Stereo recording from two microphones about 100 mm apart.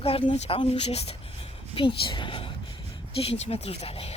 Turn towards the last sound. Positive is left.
turn(degrees=85)